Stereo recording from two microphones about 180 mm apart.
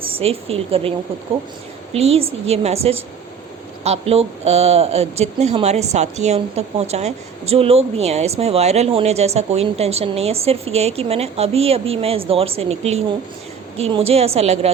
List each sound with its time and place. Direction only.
0.2 s speech: 35° right (ahead or behind)